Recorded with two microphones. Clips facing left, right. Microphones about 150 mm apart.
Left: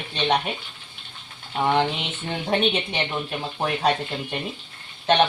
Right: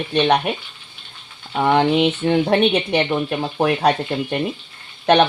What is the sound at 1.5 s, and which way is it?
Speech, 60° right (ahead or behind).